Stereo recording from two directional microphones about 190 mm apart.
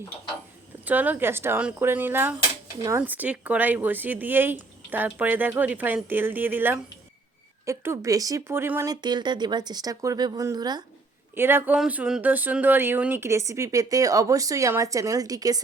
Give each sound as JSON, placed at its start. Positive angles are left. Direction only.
{"t": 0.9, "sound": "speech", "side_deg": -10}